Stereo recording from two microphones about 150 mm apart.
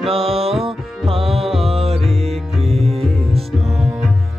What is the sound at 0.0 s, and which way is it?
Music, 40° right (ahead or behind).